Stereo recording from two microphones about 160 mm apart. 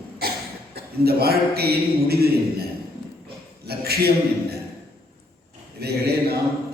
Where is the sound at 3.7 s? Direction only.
80° right.